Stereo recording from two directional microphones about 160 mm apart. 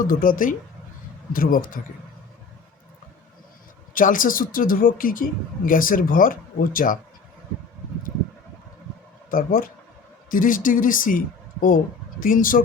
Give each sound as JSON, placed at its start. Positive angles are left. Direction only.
{"t": 0.0, "sound": "speech", "side_deg": 60}
{"t": 3.9, "sound": "speech", "side_deg": 60}
{"t": 9.3, "sound": "speech", "side_deg": 60}
{"t": 12.2, "sound": "speech", "side_deg": 60}